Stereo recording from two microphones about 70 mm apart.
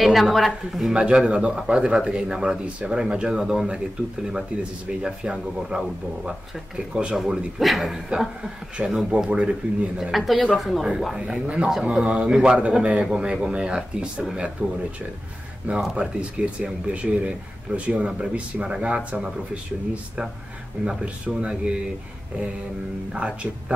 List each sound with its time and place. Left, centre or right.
0.0 s a woman's voice: centre
6.9 s a man's voice: centre
8.8 s a man's voice: centre
10.5 s a man's voice: centre; by 14.7 s right
15.8 s a man's voice: centre
23.1 s a man's voice: centre